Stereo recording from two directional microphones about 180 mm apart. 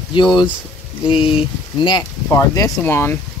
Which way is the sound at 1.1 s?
30° left (ahead or behind).